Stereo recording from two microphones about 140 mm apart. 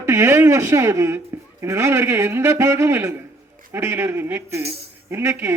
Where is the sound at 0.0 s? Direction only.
20° right (ahead or behind).